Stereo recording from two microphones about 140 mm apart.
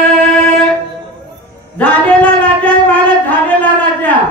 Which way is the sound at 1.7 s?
10° left (ahead or behind).